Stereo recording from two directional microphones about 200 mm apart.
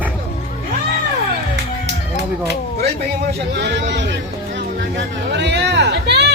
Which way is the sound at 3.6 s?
60° right (ahead or behind).